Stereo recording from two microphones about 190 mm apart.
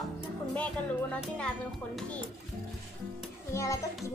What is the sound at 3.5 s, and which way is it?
Speech, 15° left (ahead or behind).